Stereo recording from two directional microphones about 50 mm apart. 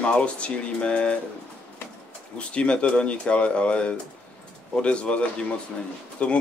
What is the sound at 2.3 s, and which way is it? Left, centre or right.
Speech, left.